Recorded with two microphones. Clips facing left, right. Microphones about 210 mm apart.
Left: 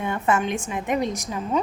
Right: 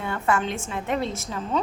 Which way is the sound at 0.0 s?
20° left (ahead or behind).